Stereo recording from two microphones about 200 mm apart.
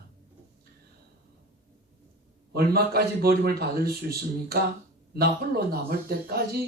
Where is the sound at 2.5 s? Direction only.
50° right (ahead or behind).